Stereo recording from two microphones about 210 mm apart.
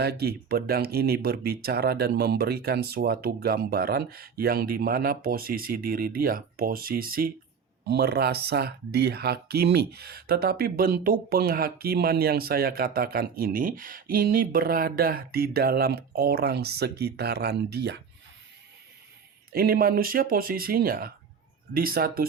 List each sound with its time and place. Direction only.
0.0 s speech: 50° right (ahead or behind)
19.5 s speech: 45° right (ahead or behind)